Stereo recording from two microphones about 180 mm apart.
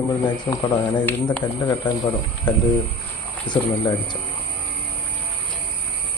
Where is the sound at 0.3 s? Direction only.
25° left (ahead or behind).